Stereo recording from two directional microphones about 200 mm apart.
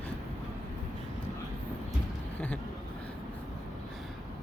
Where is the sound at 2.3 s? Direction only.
10° left (ahead or behind).